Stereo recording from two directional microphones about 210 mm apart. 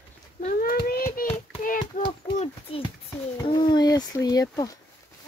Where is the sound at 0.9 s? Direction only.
45° left (ahead or behind).